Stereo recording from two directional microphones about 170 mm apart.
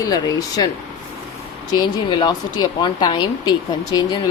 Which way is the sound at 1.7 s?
25° left (ahead or behind).